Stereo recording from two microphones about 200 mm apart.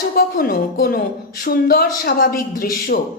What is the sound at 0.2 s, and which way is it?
A woman's voice, 45° left (ahead or behind).